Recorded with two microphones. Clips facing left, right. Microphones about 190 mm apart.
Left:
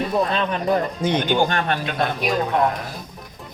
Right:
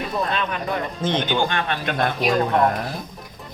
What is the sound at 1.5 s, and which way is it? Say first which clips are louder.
Speech: left 2 dB; 45° left (ahead or behind).